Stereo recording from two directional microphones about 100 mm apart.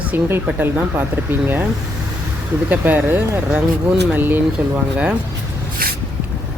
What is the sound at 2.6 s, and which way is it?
Speech, 20° right (ahead or behind).